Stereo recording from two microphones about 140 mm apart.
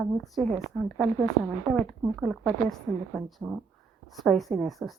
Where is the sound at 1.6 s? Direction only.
Centre (ahead or behind).